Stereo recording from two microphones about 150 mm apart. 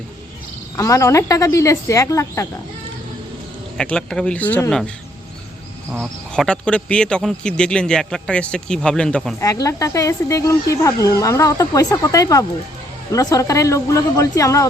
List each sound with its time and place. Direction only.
0.8 s speech: 20° left (ahead or behind)
3.8 s speech: 5° left (ahead or behind)
6.3 s a man's voice: 5° left (ahead or behind)
9.4 s speech: 20° left (ahead or behind)